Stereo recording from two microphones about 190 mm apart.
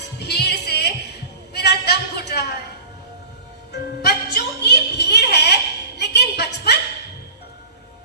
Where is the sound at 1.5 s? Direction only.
60° left (ahead or behind).